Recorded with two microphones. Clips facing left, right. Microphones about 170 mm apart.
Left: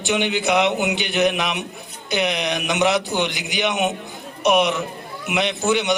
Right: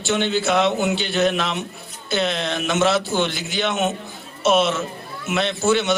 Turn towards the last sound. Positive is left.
turn(degrees=15)  # may be behind; listen again after turning